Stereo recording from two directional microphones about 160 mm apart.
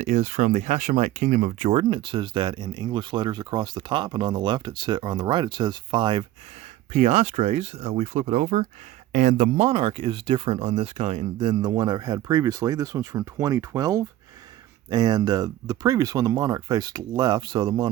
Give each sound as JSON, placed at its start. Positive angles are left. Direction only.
{"t": 0.0, "sound": "speech", "side_deg": -50}
{"t": 6.9, "sound": "speech", "side_deg": -45}